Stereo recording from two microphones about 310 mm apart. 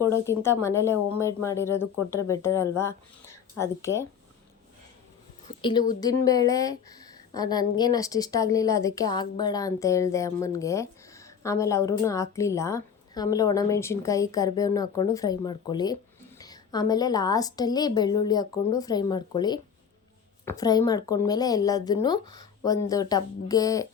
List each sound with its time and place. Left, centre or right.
0.0 s a woman's voice: centre
5.5 s a sound: left
6.0 s a woman's voice: centre